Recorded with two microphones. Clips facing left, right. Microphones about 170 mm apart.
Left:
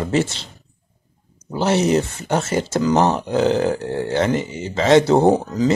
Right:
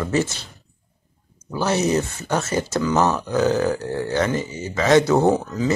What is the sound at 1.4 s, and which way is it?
Speech, 25° left (ahead or behind).